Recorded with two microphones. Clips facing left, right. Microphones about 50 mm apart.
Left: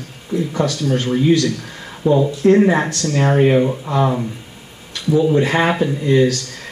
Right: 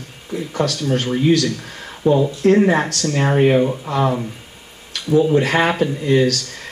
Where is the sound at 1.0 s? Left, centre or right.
Centre.